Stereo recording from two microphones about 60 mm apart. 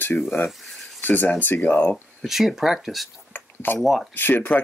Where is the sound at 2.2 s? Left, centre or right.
Centre.